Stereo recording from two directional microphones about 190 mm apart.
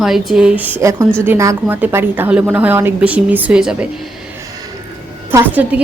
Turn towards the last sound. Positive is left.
turn(degrees=-10)  # may be behind; listen again after turning